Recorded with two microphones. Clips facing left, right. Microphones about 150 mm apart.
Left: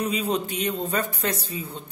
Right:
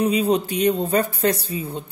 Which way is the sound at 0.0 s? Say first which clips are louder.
Right 6 dB; 35° right (ahead or behind).